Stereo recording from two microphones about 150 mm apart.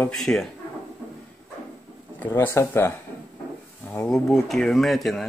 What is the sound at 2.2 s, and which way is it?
Speech, 15° left (ahead or behind).